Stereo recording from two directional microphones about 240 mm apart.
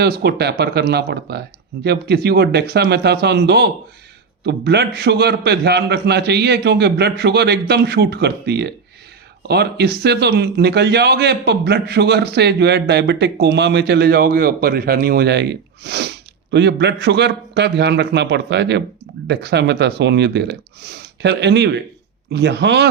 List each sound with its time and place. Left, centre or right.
0.0 s a man's voice: right